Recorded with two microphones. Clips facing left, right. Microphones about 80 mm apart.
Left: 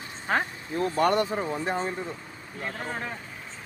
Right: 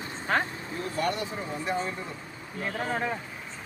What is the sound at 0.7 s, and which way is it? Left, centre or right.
Speech, left.